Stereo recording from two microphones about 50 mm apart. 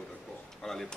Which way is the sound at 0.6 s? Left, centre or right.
Centre.